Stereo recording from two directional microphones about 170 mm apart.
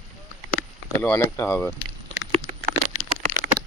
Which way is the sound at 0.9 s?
10° left (ahead or behind).